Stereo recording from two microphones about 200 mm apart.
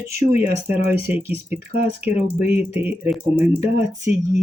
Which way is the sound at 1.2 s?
50° right (ahead or behind).